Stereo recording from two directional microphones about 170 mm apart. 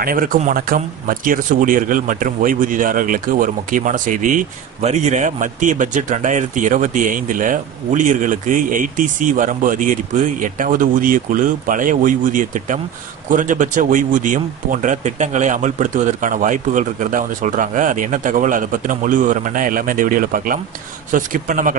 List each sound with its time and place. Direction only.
0.0 s speech: 55° right (ahead or behind)